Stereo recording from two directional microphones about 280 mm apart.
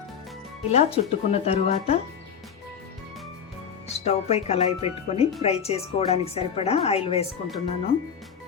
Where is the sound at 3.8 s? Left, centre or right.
Left.